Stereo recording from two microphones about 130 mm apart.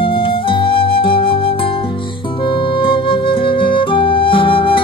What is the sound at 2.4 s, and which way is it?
Flute, 40° left (ahead or behind).